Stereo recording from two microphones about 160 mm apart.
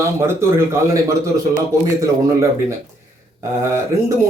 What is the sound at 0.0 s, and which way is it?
Speech, 15° right (ahead or behind).